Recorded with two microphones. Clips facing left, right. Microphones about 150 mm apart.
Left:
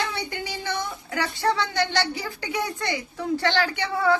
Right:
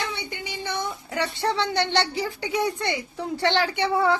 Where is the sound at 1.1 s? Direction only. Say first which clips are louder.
Left 1 dB; 30° right (ahead or behind).